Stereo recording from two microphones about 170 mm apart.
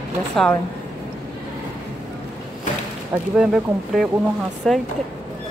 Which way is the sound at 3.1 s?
5° right (ahead or behind).